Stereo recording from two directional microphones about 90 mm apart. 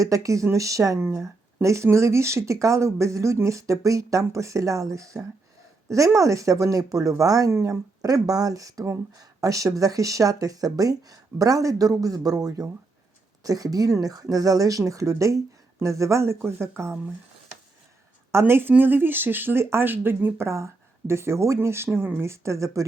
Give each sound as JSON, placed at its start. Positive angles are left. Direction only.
{"t": 0.0, "sound": "speech", "side_deg": -40}
{"t": 18.3, "sound": "a woman's voice", "side_deg": -30}